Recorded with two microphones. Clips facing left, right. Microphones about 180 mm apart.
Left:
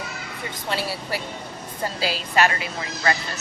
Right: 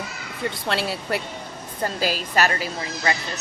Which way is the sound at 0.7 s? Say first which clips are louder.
Right 1 dB; 65° right (ahead or behind).